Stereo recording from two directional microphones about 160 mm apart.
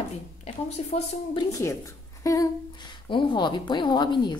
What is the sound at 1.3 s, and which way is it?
A woman's voice, 20° left (ahead or behind).